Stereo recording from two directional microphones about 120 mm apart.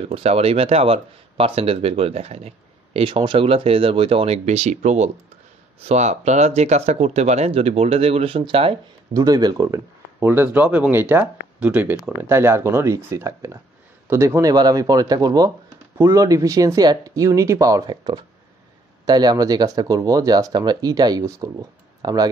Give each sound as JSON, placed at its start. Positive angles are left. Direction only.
{"t": 0.1, "sound": "speech", "side_deg": -60}
{"t": 4.5, "sound": "speech", "side_deg": -75}
{"t": 9.1, "sound": "speech", "side_deg": -30}
{"t": 10.2, "sound": "speech", "side_deg": -20}